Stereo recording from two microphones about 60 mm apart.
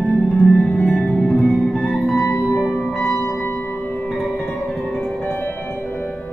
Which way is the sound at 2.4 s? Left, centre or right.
Centre.